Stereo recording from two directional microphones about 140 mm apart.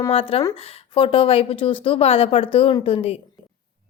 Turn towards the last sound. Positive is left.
turn(degrees=40)  # may be behind; listen again after turning